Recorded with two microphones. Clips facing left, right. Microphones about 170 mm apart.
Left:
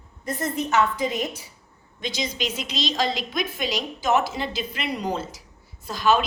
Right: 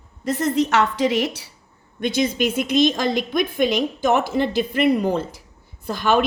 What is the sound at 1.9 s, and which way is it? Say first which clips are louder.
A woman's voice: right 9 dB; 55° right (ahead or behind).